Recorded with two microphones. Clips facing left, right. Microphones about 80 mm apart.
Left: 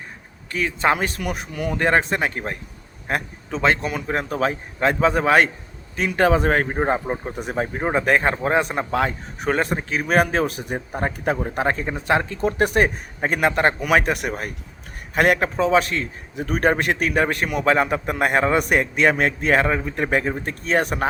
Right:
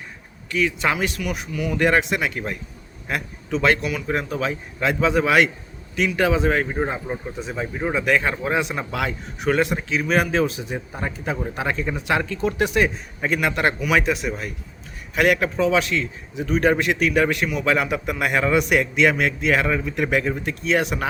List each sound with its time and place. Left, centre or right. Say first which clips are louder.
0.5 s a man's voice: left 1 dB; left
1.8 s a man's voice: even; left
3.6 s a man's voice: left 1 dB; left
13.8 s a man's voice: left 1 dB; left